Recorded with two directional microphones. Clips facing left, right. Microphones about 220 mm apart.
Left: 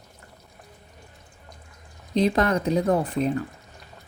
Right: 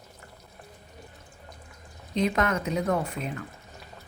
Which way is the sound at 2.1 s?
35° left (ahead or behind).